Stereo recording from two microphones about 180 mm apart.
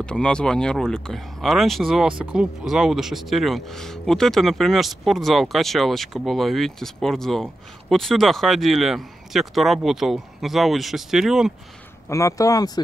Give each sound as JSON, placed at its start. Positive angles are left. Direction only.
{"t": 0.0, "sound": "speech", "side_deg": 5}
{"t": 12.1, "sound": "speech", "side_deg": 15}